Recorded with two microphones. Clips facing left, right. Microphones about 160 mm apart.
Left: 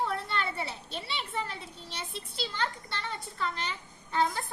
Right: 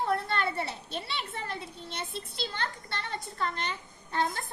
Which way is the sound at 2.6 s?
45° right (ahead or behind).